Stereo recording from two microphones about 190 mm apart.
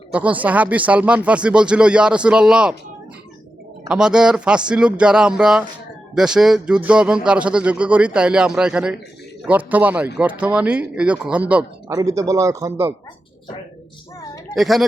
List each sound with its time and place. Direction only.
0.1 s a man's voice: 10° right (ahead or behind)
3.8 s a man's voice: 5° right (ahead or behind)
11.9 s a man's voice: 15° right (ahead or behind)
14.5 s a man's voice: centre (ahead or behind)